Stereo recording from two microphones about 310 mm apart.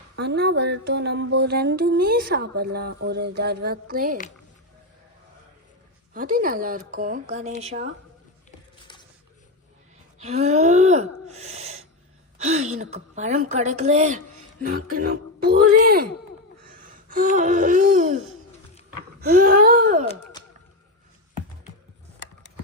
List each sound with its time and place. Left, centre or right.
0.2 s a sound: right
6.1 s a woman's voice: right
10.2 s wheeze: right
12.4 s a woman's voice: right
16.6 s gasp: right
18.9 s speech: right